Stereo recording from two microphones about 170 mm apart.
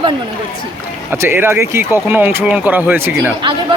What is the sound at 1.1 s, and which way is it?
Speech, 15° right (ahead or behind).